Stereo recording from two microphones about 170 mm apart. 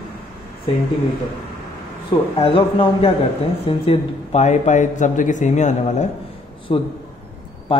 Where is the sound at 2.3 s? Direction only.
30° left (ahead or behind).